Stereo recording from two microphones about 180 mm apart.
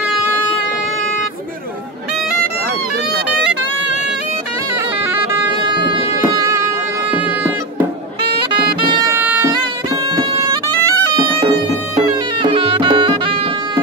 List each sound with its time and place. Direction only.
5.7 s music: 25° right (ahead or behind)
9.1 s bagpipes: 10° right (ahead or behind)
12.4 s music: 30° right (ahead or behind)